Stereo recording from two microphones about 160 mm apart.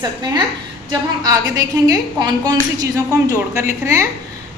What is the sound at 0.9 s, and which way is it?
A woman's voice, 20° right (ahead or behind).